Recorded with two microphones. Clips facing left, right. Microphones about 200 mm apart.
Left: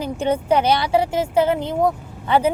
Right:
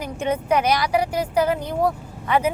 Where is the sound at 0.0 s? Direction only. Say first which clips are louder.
Left 3 dB; 30° left (ahead or behind).